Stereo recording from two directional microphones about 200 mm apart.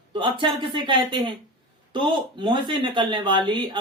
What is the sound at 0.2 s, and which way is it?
Speech, 25° right (ahead or behind).